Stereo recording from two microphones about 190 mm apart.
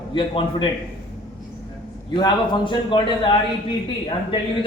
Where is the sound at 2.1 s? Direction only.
25° left (ahead or behind).